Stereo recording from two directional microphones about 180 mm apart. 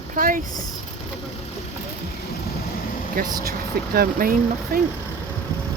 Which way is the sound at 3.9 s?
55° right (ahead or behind).